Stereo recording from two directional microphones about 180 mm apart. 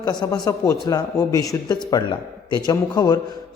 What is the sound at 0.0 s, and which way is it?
A man's voice, 20° left (ahead or behind).